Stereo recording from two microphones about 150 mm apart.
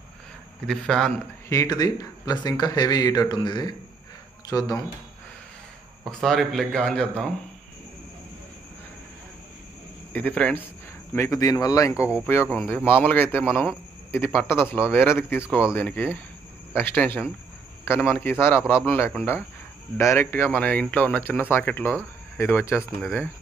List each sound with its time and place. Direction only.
0.7 s a man's voice: 5° left (ahead or behind)
1.5 s speech: 25° left (ahead or behind)
6.0 s a man's voice: centre (ahead or behind)
10.1 s speech: 10° left (ahead or behind)
11.1 s speech: 20° left (ahead or behind)
12.0 s speech: 10° right (ahead or behind)
12.4 s speech: 10° left (ahead or behind)